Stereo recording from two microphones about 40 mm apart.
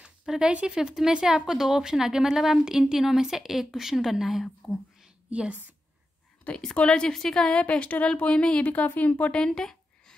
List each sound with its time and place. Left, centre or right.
0.4 s a woman's voice: right; by 5.1 s centre
5.3 s speech: right
6.5 s a woman's voice: left
7.7 s a woman's voice: left
8.6 s a woman's voice: left
9.3 s a sound: centre